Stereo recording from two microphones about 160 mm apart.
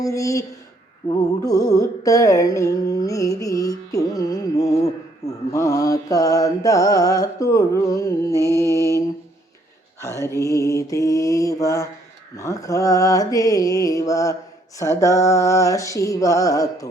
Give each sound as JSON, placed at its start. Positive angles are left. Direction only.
{"t": 0.0, "sound": "mantra", "side_deg": 20}
{"t": 10.2, "sound": "mantra", "side_deg": 20}